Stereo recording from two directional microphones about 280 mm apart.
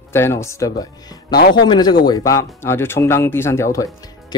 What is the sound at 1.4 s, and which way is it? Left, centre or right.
Speech, left.